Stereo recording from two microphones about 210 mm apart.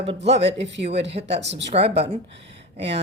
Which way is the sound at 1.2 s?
35° right (ahead or behind).